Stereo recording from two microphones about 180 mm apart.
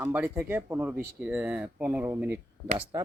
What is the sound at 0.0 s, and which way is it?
Speech, 10° right (ahead or behind).